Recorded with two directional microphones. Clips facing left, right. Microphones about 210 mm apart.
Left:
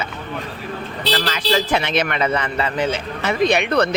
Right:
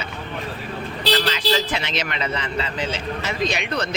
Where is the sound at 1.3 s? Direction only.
55° left (ahead or behind).